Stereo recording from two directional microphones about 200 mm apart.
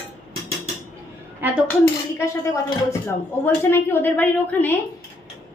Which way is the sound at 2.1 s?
15° left (ahead or behind).